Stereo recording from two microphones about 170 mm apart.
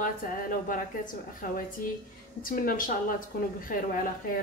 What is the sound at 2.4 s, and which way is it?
Speech, 55° left (ahead or behind).